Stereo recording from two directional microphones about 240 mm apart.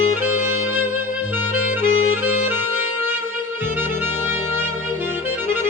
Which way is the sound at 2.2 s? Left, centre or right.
Centre.